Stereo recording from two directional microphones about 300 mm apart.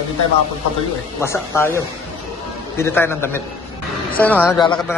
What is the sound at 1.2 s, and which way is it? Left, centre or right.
Speech, centre.